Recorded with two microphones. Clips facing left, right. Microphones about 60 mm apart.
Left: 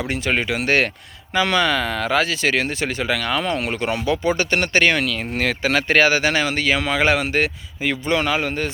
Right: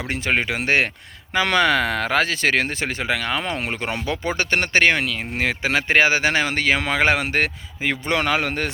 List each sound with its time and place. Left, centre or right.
0.1 s speech: right
1.3 s speech: right
3.6 s a man's voice: right